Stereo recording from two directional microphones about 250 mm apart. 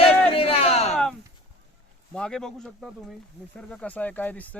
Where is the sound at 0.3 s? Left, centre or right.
Left.